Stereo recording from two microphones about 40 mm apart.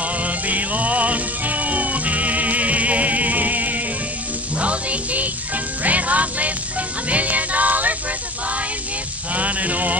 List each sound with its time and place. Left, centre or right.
0.0 s music: right
9.3 s music: right